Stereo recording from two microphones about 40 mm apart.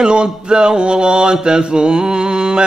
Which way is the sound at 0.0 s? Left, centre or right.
Right.